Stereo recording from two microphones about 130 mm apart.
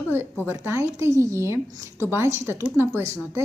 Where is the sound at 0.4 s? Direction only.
20° right (ahead or behind).